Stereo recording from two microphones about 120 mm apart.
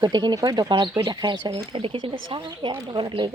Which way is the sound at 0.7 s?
45° right (ahead or behind).